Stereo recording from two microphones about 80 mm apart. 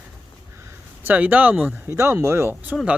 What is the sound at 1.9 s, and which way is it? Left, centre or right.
Speech, right.